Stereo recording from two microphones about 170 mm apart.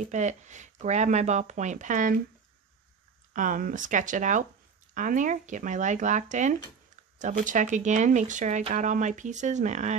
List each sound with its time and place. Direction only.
0.0 s speech: 45° right (ahead or behind)
3.3 s speech: 50° right (ahead or behind)